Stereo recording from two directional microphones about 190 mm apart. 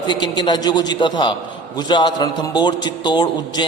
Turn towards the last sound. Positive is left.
turn(degrees=25)  # may be behind; listen again after turning